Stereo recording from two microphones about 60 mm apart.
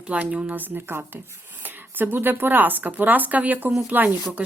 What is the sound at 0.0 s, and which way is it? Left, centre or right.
Speech, right.